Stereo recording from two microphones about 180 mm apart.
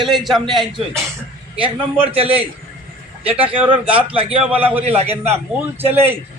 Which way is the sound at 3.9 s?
30° right (ahead or behind).